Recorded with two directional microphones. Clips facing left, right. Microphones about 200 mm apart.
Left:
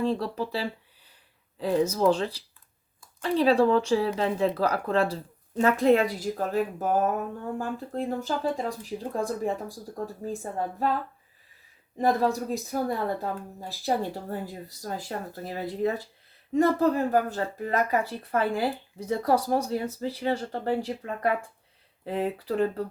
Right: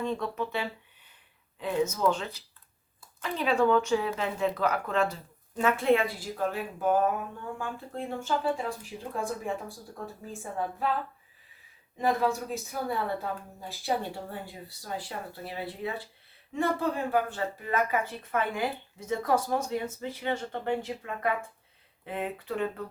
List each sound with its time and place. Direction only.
0.0 s speech: 35° left (ahead or behind)
11.9 s speech: 35° left (ahead or behind)